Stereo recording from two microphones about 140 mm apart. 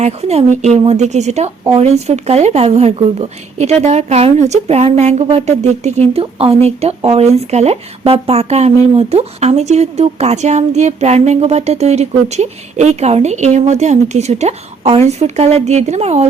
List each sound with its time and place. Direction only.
0.0 s speech: 50° right (ahead or behind)